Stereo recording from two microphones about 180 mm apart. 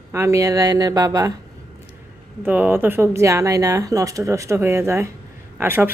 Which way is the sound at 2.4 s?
10° right (ahead or behind).